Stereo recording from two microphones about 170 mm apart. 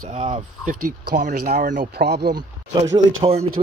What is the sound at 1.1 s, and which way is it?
Speech, 45° right (ahead or behind).